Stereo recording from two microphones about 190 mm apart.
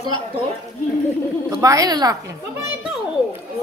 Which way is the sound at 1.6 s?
20° right (ahead or behind).